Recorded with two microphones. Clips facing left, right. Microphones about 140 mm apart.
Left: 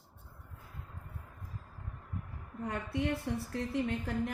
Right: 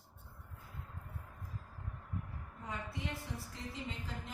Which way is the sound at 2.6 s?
65° left (ahead or behind).